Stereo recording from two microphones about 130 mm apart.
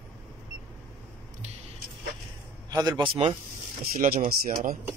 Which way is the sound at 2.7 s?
30° right (ahead or behind).